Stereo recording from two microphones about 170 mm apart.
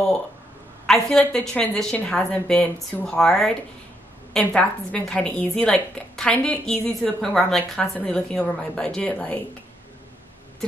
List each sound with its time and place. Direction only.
0.8 s a woman's voice: 5° left (ahead or behind)
4.6 s a woman's voice: 5° left (ahead or behind)